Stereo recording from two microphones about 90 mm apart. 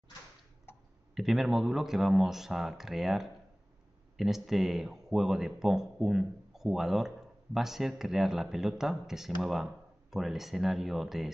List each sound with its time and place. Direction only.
0.7 s tick: 25° left (ahead or behind)
1.1 s speech: 5° right (ahead or behind)